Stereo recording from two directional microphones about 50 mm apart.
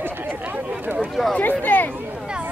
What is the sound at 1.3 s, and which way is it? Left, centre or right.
Speech, left.